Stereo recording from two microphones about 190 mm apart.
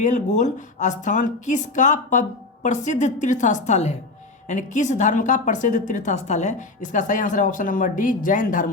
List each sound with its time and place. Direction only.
0.0 s a woman's voice: 40° left (ahead or behind)